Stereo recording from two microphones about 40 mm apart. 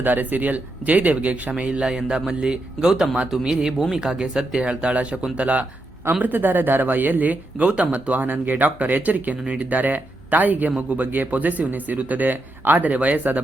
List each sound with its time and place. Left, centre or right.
0.0 s speech: right
1.8 s a man's voice: centre
4.6 s speech: right
6.2 s speech: right
7.6 s speech: right
12.9 s speech: right